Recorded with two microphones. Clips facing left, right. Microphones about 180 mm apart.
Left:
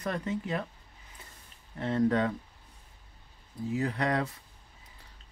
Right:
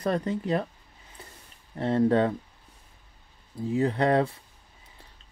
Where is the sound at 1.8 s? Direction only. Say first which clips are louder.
Right 4 dB; 35° right (ahead or behind).